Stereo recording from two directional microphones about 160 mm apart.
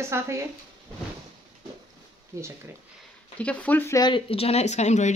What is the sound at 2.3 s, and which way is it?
Speech, 20° right (ahead or behind).